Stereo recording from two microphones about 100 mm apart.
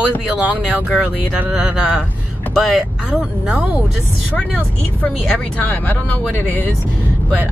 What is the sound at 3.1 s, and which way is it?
Speech, 10° right (ahead or behind).